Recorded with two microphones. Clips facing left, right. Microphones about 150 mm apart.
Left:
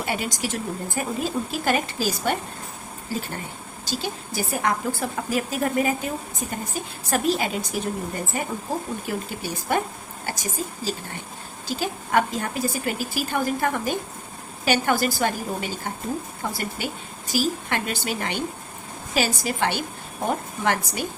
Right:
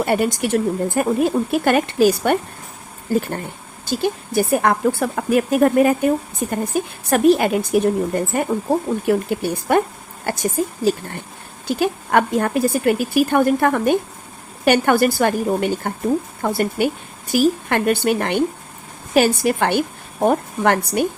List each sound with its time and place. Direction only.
0.0 s speech: 55° right (ahead or behind)
9.0 s speech: 60° right (ahead or behind)